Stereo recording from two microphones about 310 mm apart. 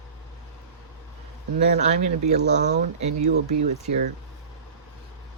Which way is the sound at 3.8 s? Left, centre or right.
Right.